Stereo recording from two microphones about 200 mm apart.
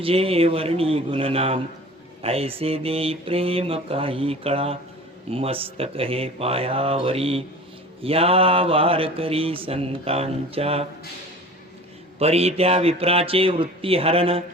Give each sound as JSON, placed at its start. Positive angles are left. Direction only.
{"t": 0.0, "sound": "speech", "side_deg": -30}
{"t": 12.2, "sound": "speech", "side_deg": -30}